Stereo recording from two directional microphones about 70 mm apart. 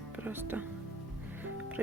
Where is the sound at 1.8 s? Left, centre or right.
Right.